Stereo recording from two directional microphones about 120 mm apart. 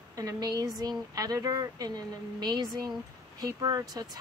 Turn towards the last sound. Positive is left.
turn(degrees=-30)  # may be behind; listen again after turning